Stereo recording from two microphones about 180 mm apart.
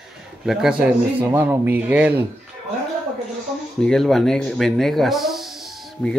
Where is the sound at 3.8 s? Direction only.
Centre (ahead or behind).